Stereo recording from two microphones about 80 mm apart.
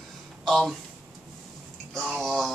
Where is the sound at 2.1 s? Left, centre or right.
Centre.